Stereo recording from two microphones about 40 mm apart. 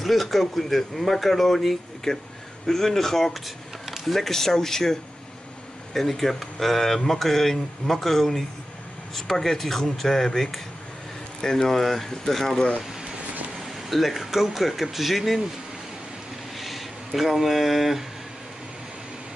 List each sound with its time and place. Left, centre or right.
0.0 s speech: centre
5.9 s speech: centre
11.7 s speech: centre
12.5 s speech: left
13.6 s speech: centre
16.5 s speech: centre